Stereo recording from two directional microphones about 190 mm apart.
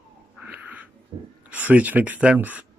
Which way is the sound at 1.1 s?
20° right (ahead or behind).